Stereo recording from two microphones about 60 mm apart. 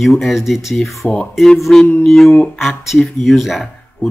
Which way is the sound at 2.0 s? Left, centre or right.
Centre.